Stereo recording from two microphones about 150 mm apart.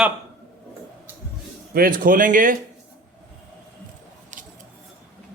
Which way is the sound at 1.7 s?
75° right (ahead or behind).